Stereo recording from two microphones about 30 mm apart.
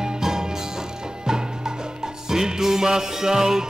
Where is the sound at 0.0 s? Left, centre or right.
Right.